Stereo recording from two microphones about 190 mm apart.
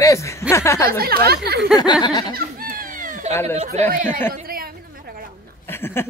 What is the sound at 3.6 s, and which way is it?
Speech, 35° right (ahead or behind).